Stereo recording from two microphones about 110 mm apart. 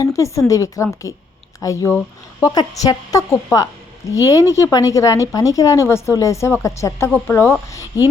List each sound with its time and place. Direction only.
0.0 s a woman's voice: 30° left (ahead or behind)